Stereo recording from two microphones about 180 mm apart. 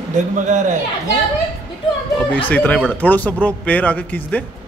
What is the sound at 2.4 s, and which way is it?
A man's voice, 10° left (ahead or behind).